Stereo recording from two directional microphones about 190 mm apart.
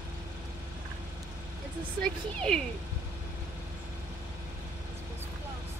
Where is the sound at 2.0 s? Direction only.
5° left (ahead or behind).